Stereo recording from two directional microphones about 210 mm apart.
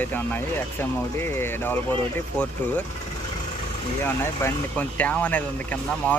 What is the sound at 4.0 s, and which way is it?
Speech, 10° left (ahead or behind).